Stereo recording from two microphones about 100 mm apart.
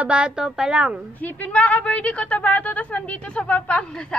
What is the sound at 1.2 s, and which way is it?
A woman's voice, 15° left (ahead or behind).